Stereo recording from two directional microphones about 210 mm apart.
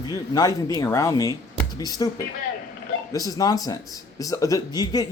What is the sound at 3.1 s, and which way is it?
Speech, 15° left (ahead or behind).